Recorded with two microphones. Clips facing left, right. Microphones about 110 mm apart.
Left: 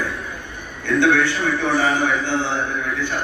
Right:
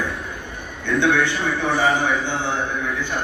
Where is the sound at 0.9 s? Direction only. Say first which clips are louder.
Left 2 dB; 15° right (ahead or behind).